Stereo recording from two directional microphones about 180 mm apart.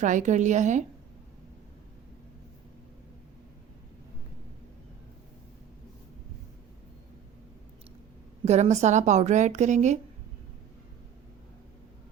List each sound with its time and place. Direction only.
0.0 s a woman's voice: 45° right (ahead or behind)
8.4 s a woman's voice: 40° right (ahead or behind)